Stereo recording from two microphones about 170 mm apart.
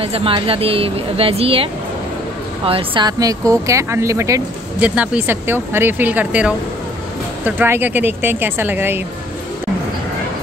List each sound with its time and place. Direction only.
0.0 s speech: 35° right (ahead or behind); by 9.0 s 10° right (ahead or behind)